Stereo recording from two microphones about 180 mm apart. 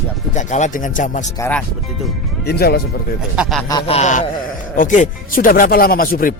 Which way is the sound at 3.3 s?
Centre (ahead or behind).